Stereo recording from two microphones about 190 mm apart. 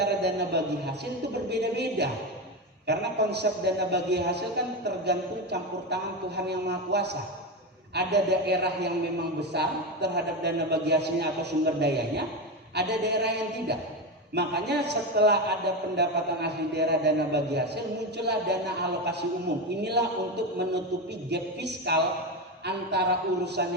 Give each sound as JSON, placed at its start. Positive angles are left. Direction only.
{"t": 0.0, "sound": "a man's voice", "side_deg": -60}
{"t": 21.2, "sound": "a man's voice", "side_deg": -60}